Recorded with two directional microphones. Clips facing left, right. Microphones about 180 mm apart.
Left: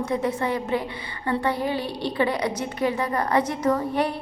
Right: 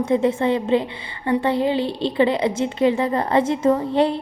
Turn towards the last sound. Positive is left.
turn(degrees=-25)  # may be behind; listen again after turning